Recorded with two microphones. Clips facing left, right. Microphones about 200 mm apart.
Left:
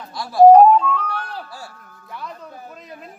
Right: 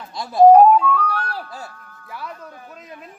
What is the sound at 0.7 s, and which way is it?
Music, 5° right (ahead or behind).